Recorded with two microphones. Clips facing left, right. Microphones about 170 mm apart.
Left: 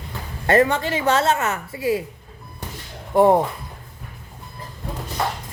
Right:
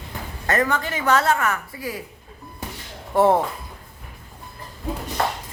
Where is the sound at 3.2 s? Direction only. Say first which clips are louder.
Left 2 dB; 15° left (ahead or behind).